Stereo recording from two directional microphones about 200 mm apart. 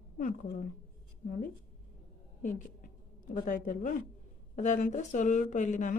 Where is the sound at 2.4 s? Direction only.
40° left (ahead or behind).